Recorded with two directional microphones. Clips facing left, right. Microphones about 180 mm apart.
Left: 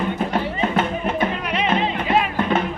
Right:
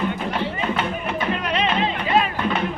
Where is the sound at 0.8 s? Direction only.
50° left (ahead or behind).